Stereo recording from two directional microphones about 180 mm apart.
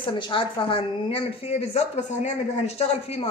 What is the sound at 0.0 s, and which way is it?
A woman's voice, 25° left (ahead or behind).